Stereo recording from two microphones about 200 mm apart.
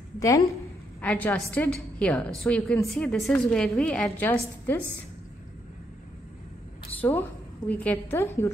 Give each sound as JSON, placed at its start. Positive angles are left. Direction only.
{"t": 1.0, "sound": "a woman's voice", "side_deg": 10}
{"t": 7.0, "sound": "a woman's voice", "side_deg": 10}